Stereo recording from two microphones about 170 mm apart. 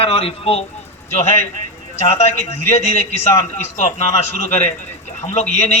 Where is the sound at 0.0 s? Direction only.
35° left (ahead or behind).